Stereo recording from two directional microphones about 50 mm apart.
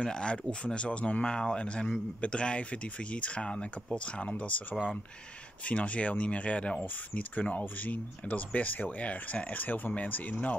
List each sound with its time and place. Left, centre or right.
0.0 s speech: centre
5.7 s speech: left